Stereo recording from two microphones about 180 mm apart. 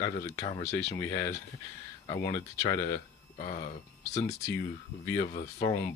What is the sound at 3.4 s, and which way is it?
Speech, 45° left (ahead or behind).